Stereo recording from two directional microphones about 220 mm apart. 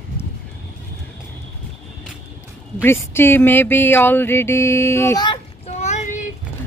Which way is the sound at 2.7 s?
10° left (ahead or behind).